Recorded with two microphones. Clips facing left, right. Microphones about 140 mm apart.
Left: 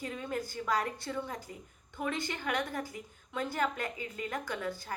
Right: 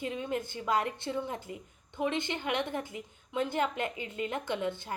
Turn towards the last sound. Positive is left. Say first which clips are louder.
# right 4 dB
turn(degrees=-25)  # may be behind; listen again after turning